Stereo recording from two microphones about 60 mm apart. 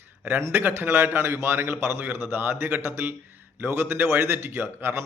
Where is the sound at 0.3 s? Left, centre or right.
Right.